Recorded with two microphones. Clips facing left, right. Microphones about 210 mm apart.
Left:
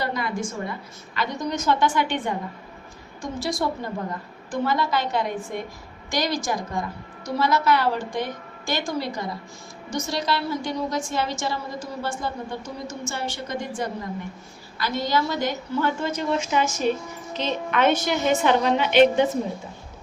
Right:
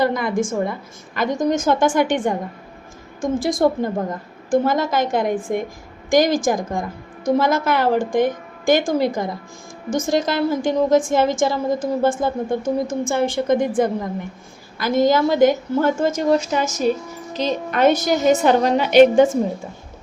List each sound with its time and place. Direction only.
0.0 s a woman's voice: 50° right (ahead or behind)